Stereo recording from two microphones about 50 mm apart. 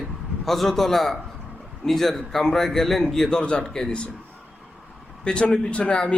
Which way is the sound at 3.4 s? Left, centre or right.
Centre.